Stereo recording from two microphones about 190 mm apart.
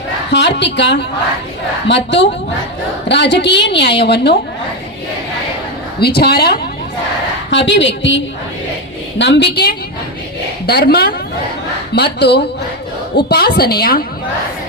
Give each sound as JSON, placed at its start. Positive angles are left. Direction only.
{"t": 0.3, "sound": "a woman's voice", "side_deg": 65}
{"t": 6.0, "sound": "a woman's voice", "side_deg": 55}
{"t": 7.5, "sound": "a woman's voice", "side_deg": 70}